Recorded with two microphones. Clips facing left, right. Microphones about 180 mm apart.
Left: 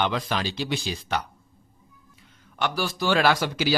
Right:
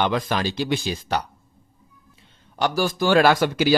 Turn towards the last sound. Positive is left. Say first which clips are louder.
# right 5 dB
turn(degrees=-55)  # may be behind; listen again after turning